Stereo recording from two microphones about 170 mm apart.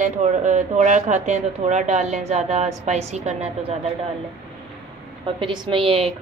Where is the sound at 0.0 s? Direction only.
45° right (ahead or behind).